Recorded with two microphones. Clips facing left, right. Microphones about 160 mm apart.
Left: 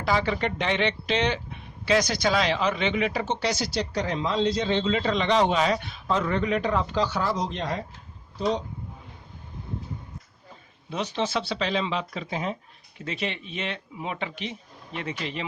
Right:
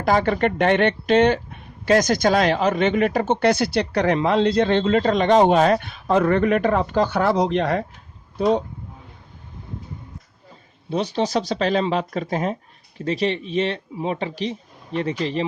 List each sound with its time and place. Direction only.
0.0 s speech: 50° right (ahead or behind)
10.8 s a man's voice: 35° right (ahead or behind)